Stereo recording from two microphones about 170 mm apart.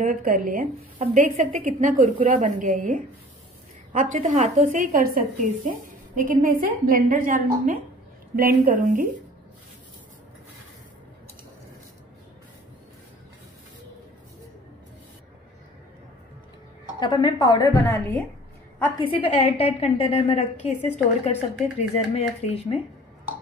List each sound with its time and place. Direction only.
0.0 s a woman's voice: 55° right (ahead or behind)
17.0 s a woman's voice: 25° left (ahead or behind)
18.9 s a woman's voice: 30° left (ahead or behind)